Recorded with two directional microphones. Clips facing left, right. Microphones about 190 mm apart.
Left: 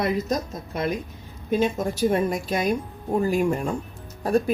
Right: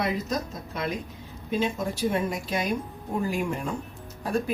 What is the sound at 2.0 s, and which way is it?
Speech, 40° left (ahead or behind).